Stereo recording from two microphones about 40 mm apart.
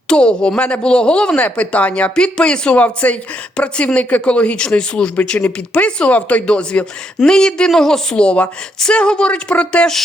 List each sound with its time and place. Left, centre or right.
0.1 s speech: left
2.1 s speech: left
2.7 s speech: left
5.3 s speech: left
5.7 s speech: left
6.1 s speech: left; by 8.0 s centre
8.1 s speech: left